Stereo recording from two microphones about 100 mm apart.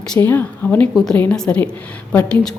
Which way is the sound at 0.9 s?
5° left (ahead or behind).